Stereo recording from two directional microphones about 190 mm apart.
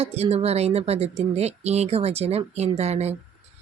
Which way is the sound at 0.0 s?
35° right (ahead or behind).